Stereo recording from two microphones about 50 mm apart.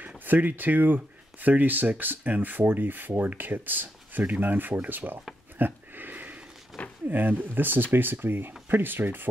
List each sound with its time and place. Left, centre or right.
0.2 s speech: right
5.6 s a sound: right
7.1 s speech: right